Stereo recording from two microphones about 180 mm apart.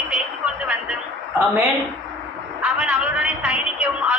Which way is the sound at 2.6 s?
5° right (ahead or behind).